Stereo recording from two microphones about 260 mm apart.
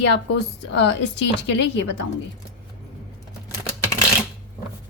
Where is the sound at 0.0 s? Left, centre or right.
Left.